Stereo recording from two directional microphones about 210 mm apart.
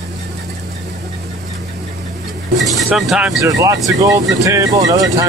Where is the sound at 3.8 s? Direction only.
15° right (ahead or behind).